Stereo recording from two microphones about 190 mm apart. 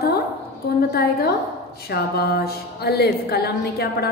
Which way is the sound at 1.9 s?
55° left (ahead or behind).